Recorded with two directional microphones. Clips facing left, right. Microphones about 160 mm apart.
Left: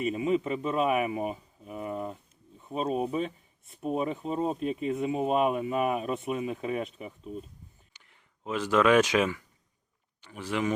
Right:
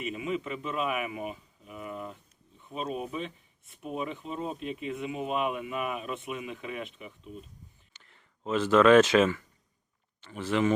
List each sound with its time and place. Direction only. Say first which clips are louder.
0.0 s speech: left 6 dB; 35° left (ahead or behind)
7.9 s a man's voice: right 2 dB; 10° left (ahead or behind)